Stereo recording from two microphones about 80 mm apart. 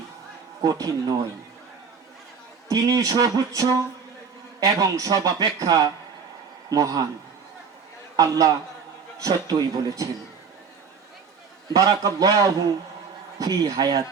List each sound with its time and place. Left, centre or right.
0.6 s speech: right
2.6 s speech: right
4.8 s speech: right
8.1 s a man's voice: right
11.7 s speech: right